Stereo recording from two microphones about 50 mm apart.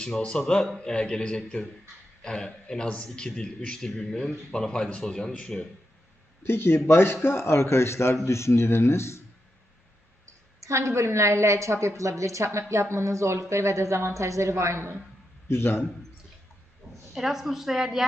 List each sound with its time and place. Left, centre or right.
0.0 s a man's voice: centre
6.4 s a man's voice: left
10.6 s a woman's voice: right
15.4 s a man's voice: left
16.8 s a sound: centre
17.2 s a woman's voice: centre